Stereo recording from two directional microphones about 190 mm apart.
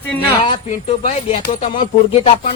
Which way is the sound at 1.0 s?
40° left (ahead or behind).